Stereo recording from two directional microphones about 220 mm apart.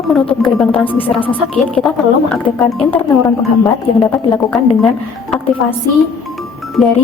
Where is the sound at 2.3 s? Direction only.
5° left (ahead or behind).